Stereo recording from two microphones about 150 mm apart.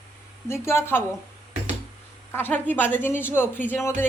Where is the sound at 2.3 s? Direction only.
10° left (ahead or behind).